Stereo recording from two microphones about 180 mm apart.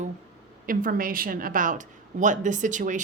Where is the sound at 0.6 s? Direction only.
50° right (ahead or behind).